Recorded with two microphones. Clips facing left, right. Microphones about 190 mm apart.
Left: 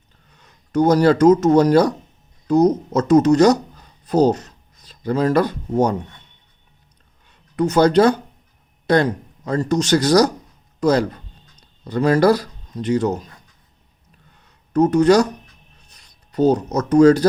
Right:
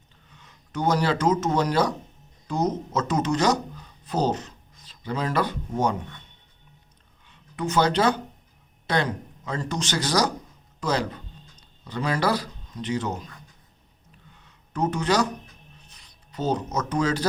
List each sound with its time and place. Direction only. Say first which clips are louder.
0.3 s speech: left 5 dB; 40° left (ahead or behind)
7.3 s a man's voice: left 9 dB; 40° left (ahead or behind)
14.3 s a sound: left 12 dB; 45° left (ahead or behind)
15.9 s speech: even; 45° left (ahead or behind)